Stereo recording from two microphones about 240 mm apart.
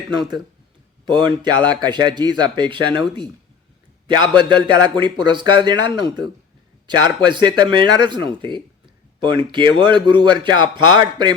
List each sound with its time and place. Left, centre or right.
1.0 s speech: centre
4.6 s speech: centre